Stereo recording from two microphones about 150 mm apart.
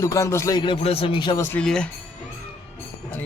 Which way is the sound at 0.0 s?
20° left (ahead or behind).